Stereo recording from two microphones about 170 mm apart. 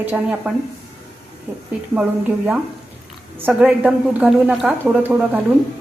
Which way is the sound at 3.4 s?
10° right (ahead or behind).